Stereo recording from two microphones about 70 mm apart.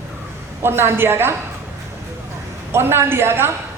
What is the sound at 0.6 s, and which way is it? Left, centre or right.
Speech, right.